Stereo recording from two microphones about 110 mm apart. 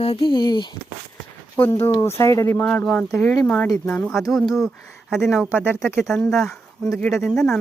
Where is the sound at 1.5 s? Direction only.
15° left (ahead or behind).